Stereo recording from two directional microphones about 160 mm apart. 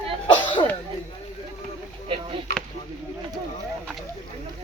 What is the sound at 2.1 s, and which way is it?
Speech, 35° right (ahead or behind).